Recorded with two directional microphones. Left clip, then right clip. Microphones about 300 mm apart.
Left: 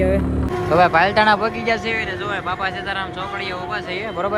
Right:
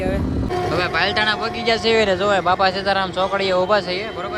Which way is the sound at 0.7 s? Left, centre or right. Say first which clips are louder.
Left 7 dB; centre.